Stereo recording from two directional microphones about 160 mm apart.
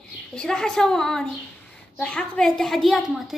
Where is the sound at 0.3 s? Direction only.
5° left (ahead or behind).